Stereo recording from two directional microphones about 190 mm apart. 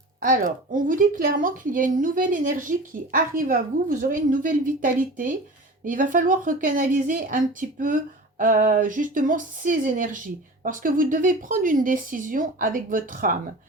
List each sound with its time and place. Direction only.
0.2 s a woman's voice: 45° right (ahead or behind)